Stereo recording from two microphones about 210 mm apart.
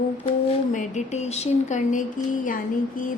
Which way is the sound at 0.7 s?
35° left (ahead or behind).